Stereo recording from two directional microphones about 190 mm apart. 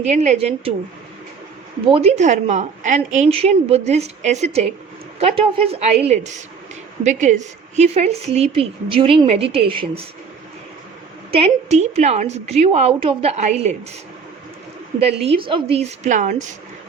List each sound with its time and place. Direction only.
0.0 s a woman's voice: 40° right (ahead or behind)
1.9 s a woman's voice: 30° right (ahead or behind)
11.3 s a woman's voice: 30° right (ahead or behind)
15.2 s a woman's voice: 30° right (ahead or behind)